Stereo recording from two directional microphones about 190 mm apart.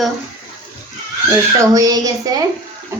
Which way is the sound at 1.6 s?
20° right (ahead or behind).